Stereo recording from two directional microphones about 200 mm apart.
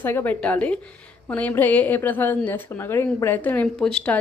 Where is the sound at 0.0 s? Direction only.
10° left (ahead or behind).